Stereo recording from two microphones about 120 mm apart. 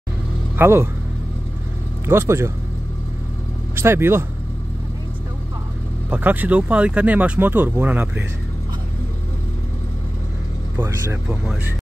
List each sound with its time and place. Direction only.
0.6 s speech: 20° right (ahead or behind)
2.0 s speech: 20° right (ahead or behind)
3.7 s speech: 20° right (ahead or behind)
6.0 s speech: 15° right (ahead or behind)
10.8 s speech: 20° right (ahead or behind)
11.2 s speech: 5° right (ahead or behind)